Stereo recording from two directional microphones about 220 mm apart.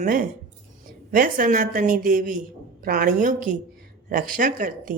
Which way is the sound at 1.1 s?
40° right (ahead or behind).